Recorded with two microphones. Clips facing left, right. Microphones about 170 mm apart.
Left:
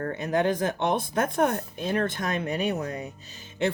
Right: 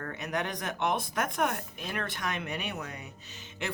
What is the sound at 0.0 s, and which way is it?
Speech, 30° left (ahead or behind).